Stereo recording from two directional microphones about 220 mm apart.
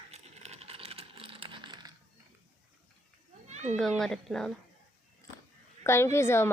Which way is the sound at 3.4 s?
30° right (ahead or behind).